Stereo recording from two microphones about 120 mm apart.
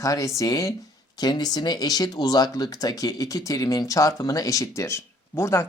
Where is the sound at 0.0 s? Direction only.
30° left (ahead or behind).